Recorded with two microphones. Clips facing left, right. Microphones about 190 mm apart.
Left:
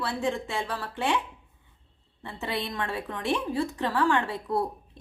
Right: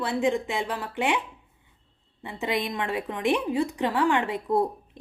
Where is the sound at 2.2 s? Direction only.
15° right (ahead or behind).